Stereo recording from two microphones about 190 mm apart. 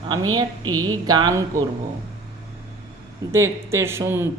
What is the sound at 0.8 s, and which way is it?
Speech, 20° right (ahead or behind).